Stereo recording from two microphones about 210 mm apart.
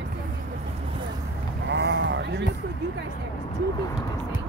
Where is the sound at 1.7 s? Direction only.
55° right (ahead or behind).